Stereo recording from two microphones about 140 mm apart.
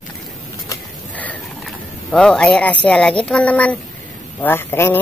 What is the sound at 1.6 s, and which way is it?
A man's voice, 5° left (ahead or behind).